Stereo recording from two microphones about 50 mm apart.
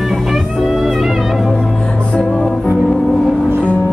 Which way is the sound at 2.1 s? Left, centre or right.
Centre.